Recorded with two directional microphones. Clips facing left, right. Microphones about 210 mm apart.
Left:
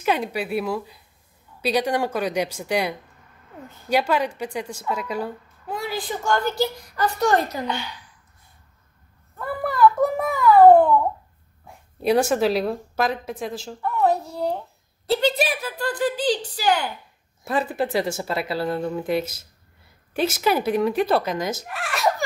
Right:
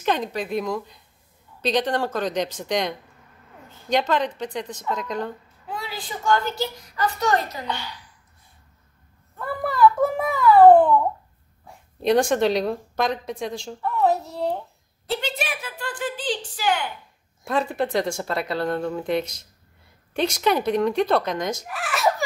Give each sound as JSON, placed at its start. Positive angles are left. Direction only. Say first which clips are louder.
{"t": 0.0, "sound": "a woman's voice", "louder": "left 1 dB", "side_deg": 10}
{"t": 5.7, "sound": "a woman's voice", "louder": "left 5 dB", "side_deg": 45}
{"t": 9.4, "sound": "a sound", "louder": "even", "side_deg": 0}
{"t": 11.6, "sound": "a woman's voice", "louder": "even", "side_deg": 5}
{"t": 15.0, "sound": "a woman's voice", "louder": "left 7 dB", "side_deg": 35}
{"t": 17.5, "sound": "speech", "louder": "even", "side_deg": 5}